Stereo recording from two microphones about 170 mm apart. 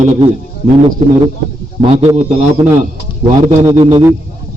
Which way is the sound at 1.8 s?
40° right (ahead or behind).